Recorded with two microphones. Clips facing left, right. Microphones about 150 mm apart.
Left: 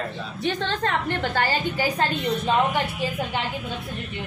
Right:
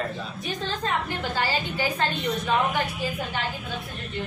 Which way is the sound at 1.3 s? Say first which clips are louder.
Even; 50° left (ahead or behind).